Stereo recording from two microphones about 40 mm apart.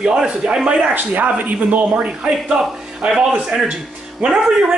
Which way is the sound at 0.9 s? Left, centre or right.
Right.